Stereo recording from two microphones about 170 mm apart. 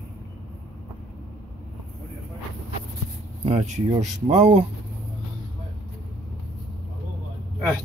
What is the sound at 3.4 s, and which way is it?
Speech, 40° right (ahead or behind).